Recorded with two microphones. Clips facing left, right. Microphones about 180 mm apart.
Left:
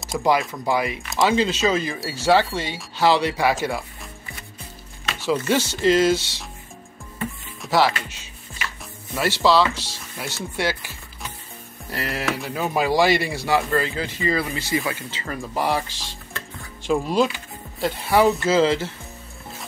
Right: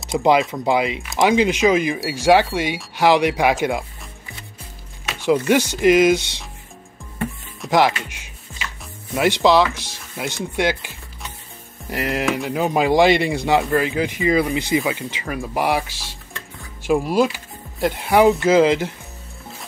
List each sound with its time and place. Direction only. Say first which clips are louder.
0.2 s speech: right 4 dB; 20° right (ahead or behind)
5.0 s speech: right 5 dB; 15° right (ahead or behind)
7.7 s speech: right 3 dB; 15° right (ahead or behind)